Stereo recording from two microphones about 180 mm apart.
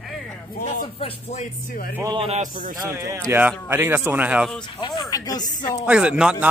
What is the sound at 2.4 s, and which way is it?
Speech, 45° right (ahead or behind).